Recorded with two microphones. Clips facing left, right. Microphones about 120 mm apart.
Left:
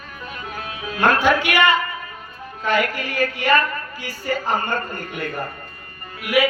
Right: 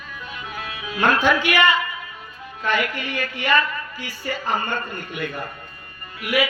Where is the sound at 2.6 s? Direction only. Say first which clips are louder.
Left 2 dB; 40° left (ahead or behind).